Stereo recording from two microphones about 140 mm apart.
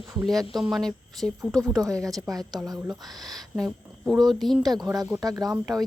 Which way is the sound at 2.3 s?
25° right (ahead or behind).